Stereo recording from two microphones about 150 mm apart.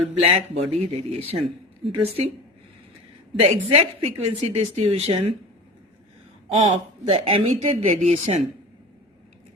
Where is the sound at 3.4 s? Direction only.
45° right (ahead or behind).